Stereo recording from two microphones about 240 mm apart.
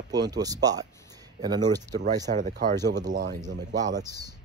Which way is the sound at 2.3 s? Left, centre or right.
Right.